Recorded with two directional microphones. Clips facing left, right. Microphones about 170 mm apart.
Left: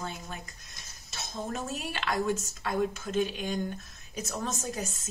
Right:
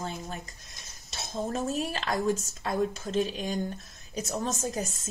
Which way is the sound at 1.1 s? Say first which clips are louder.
Right 4 dB; 35° right (ahead or behind).